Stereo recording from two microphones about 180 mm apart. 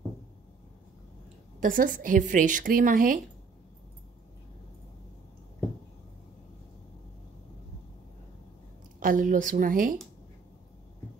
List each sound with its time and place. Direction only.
1.6 s a woman's voice: 50° right (ahead or behind)
9.0 s a woman's voice: 50° right (ahead or behind)